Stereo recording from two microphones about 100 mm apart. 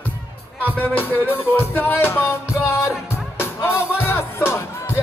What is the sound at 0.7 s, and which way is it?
Music, 20° left (ahead or behind).